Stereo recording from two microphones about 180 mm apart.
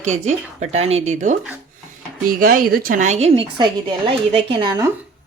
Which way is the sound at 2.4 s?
55° right (ahead or behind).